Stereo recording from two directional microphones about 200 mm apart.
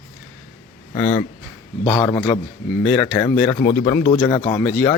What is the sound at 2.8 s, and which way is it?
Speech, 5° left (ahead or behind).